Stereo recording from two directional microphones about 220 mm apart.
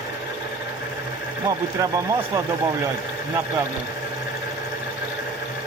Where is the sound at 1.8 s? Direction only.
15° right (ahead or behind).